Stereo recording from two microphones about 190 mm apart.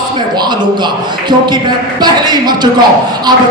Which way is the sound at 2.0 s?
20° right (ahead or behind).